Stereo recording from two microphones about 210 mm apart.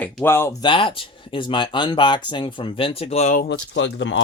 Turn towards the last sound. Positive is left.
turn(degrees=65)  # may be behind; listen again after turning